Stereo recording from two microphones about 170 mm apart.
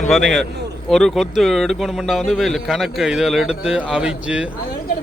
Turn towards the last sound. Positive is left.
turn(degrees=-5)  # may be behind; listen again after turning